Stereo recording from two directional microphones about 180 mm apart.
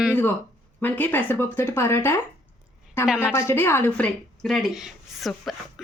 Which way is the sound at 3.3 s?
15° left (ahead or behind).